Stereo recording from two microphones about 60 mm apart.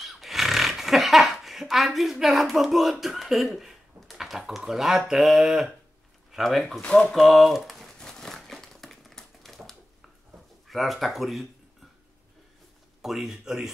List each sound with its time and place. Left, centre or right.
0.0 s a sound: centre
6.3 s speech: centre
6.8 s speech: centre
7.1 s speech: centre
8.0 s crumpling: centre
10.7 s speech: centre
13.0 s speech: centre